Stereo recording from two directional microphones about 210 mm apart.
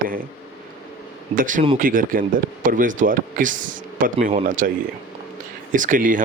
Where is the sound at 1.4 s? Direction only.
40° right (ahead or behind).